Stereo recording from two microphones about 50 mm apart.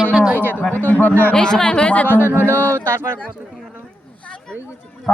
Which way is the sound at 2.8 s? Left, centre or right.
Right.